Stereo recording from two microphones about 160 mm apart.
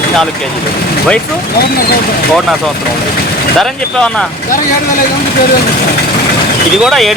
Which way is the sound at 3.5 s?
5° left (ahead or behind).